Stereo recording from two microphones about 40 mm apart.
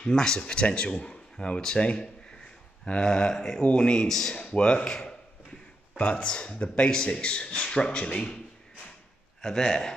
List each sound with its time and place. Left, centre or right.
0.0 s speech: centre
9.4 s speech: centre